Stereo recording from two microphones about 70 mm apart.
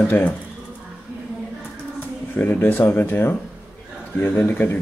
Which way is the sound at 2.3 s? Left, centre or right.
Left.